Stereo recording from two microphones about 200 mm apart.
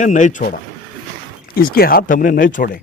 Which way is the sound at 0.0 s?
40° left (ahead or behind).